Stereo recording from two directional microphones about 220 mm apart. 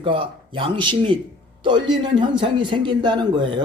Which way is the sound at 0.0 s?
25° right (ahead or behind).